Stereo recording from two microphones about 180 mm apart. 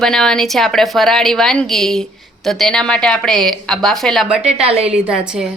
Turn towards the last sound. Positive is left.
turn(degrees=-5)  # may be behind; listen again after turning